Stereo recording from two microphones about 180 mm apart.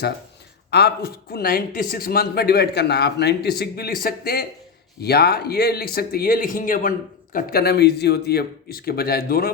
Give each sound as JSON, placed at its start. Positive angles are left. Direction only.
{"t": 0.7, "sound": "speech", "side_deg": 60}